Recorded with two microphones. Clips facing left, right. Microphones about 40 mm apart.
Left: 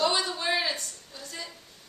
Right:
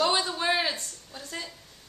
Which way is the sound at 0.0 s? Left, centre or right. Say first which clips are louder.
Right 1 dB; centre.